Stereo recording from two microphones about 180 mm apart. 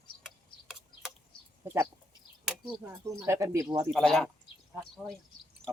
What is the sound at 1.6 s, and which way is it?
Speech, 15° right (ahead or behind).